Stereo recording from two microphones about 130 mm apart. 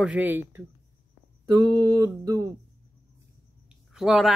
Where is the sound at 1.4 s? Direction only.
35° right (ahead or behind).